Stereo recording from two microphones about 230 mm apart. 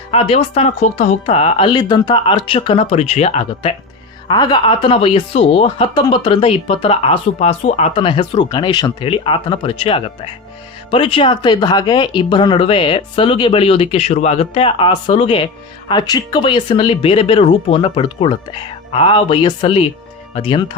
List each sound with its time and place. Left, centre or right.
0.1 s speech: left